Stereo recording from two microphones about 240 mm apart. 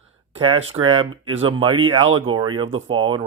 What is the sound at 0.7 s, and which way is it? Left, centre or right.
Speech, right.